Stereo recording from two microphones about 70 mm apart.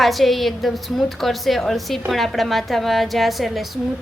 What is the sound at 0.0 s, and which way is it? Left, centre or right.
A woman's voice, centre.